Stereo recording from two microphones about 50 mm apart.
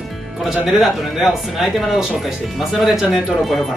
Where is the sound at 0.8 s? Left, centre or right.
Centre.